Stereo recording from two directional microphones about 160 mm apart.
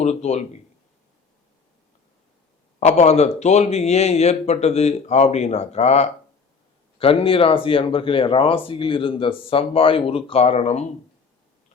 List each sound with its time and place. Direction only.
0.0 s speech: 45° left (ahead or behind)
2.8 s speech: 45° left (ahead or behind)